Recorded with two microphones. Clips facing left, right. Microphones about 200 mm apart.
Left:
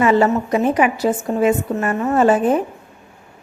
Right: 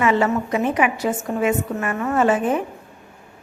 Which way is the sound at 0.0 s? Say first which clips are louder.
Left 4 dB; 35° left (ahead or behind).